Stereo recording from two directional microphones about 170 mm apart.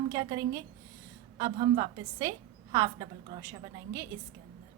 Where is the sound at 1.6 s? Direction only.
35° right (ahead or behind).